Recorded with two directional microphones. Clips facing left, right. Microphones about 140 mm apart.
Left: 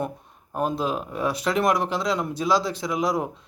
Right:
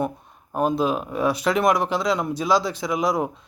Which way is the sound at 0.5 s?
5° right (ahead or behind).